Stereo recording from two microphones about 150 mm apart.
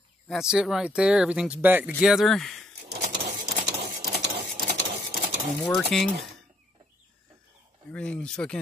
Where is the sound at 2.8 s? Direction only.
90° right.